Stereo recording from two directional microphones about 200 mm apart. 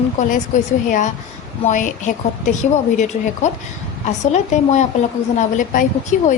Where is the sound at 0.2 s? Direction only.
40° left (ahead or behind).